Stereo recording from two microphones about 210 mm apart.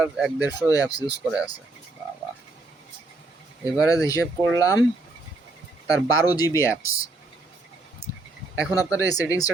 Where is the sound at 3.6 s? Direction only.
15° left (ahead or behind).